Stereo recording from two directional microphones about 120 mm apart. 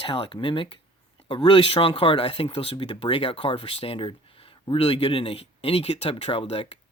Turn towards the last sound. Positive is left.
turn(degrees=55)  # may be behind; listen again after turning